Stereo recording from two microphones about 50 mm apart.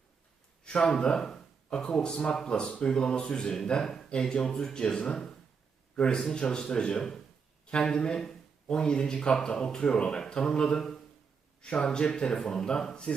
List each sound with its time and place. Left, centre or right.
0.6 s a man's voice: centre